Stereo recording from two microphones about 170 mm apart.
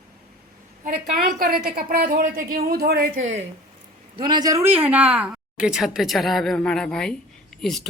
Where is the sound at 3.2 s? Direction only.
45° right (ahead or behind).